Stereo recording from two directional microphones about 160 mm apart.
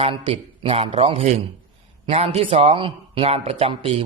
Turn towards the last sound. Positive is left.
turn(degrees=-35)  # may be behind; listen again after turning